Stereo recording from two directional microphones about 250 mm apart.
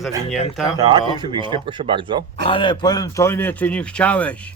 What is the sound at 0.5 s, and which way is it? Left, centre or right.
Speech, centre.